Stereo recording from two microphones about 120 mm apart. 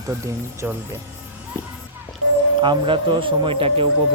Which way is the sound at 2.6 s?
40° right (ahead or behind).